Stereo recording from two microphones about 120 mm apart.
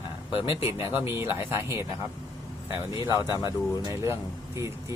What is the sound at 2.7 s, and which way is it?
Speech, 40° left (ahead or behind).